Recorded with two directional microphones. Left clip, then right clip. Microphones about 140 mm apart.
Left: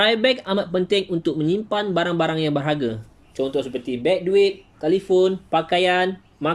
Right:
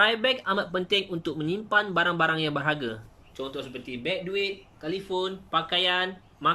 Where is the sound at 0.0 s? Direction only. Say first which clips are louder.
Left 5 dB; 25° left (ahead or behind).